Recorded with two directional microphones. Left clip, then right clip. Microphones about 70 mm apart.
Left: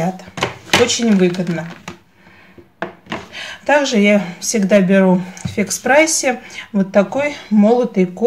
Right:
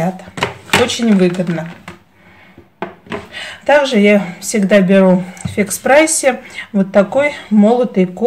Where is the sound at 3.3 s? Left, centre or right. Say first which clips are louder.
Right 3 dB; right.